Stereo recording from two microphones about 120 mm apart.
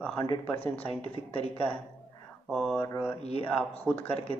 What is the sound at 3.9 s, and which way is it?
Speech, 55° left (ahead or behind).